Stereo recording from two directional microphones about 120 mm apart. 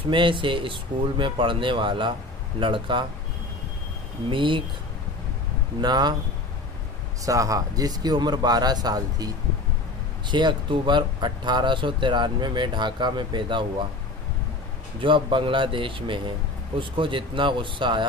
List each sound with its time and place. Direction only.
0.1 s speech: 45° right (ahead or behind)
4.3 s speech: 45° right (ahead or behind)
5.8 s speech: 35° right (ahead or behind)
7.2 s speech: 30° right (ahead or behind); by 13.8 s 45° right (ahead or behind)
15.0 s speech: 45° right (ahead or behind)